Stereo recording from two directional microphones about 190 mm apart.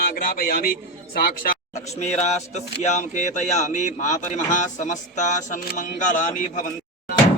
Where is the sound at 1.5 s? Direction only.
35° left (ahead or behind).